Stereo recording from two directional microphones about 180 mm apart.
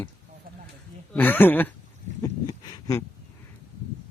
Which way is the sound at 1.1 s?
10° left (ahead or behind).